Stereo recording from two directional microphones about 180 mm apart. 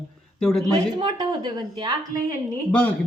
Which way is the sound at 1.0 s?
25° right (ahead or behind).